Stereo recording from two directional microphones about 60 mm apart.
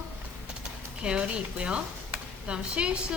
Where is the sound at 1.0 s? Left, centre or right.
Centre.